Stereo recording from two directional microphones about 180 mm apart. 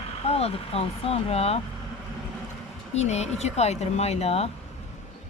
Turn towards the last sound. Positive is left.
turn(degrees=35)  # may be behind; listen again after turning